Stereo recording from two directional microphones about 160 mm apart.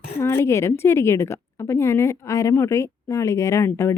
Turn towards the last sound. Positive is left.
turn(degrees=15)  # may be behind; listen again after turning